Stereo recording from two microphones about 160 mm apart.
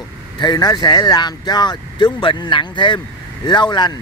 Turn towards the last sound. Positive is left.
turn(degrees=30)  # may be behind; listen again after turning